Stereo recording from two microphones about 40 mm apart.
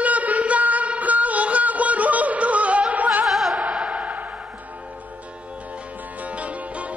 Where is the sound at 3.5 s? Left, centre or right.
Right.